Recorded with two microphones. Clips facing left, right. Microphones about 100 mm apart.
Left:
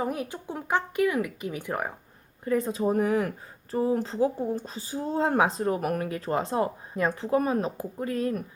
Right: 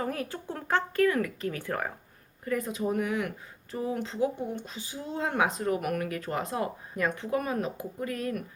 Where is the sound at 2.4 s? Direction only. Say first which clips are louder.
Left 4 dB; 25° left (ahead or behind).